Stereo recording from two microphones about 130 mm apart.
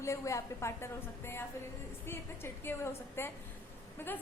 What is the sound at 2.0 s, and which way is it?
A woman's voice, 20° left (ahead or behind).